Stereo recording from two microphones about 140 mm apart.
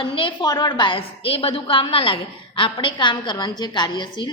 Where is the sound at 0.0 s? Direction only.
40° left (ahead or behind).